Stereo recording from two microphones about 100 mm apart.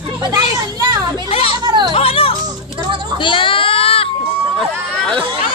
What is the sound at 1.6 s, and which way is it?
Music, 45° right (ahead or behind).